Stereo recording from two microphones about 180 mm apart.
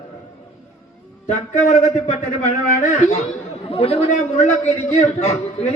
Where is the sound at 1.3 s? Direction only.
40° left (ahead or behind).